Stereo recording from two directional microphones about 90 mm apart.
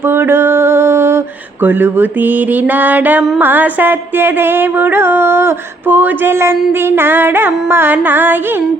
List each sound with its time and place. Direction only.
0.0 s mantra: 25° right (ahead or behind)
1.6 s music: 20° right (ahead or behind)